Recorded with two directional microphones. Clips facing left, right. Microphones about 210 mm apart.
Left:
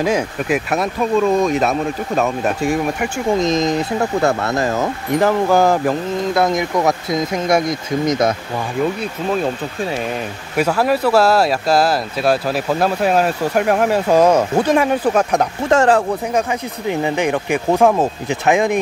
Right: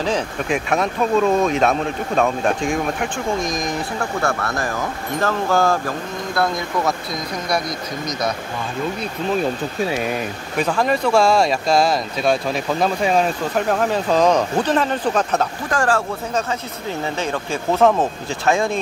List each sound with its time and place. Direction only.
0.0 s speech: 5° left (ahead or behind)
3.3 s speech: 20° left (ahead or behind)
10.5 s speech: 5° left (ahead or behind)
15.7 s speech: 20° left (ahead or behind)